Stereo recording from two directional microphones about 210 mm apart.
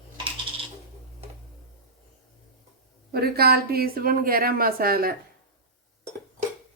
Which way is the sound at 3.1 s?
50° right (ahead or behind).